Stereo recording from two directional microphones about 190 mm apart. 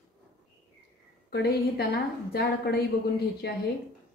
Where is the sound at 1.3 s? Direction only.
60° left (ahead or behind).